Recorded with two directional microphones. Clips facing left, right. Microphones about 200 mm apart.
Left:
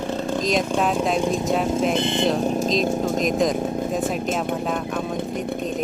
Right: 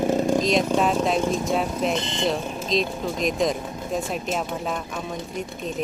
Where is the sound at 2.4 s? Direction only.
45° left (ahead or behind).